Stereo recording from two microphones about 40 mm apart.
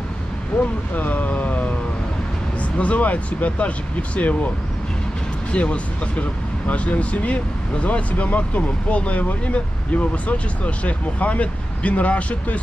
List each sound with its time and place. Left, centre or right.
0.9 s speech: left
5.5 s speech: left